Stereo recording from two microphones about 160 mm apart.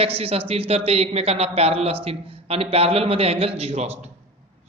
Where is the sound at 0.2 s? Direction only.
40° right (ahead or behind).